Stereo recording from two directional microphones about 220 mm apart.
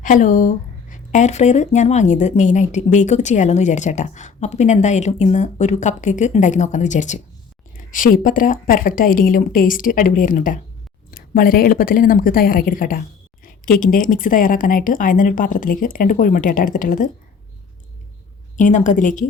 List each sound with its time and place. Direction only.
0.0 s speech: 35° left (ahead or behind)
18.5 s speech: 35° left (ahead or behind)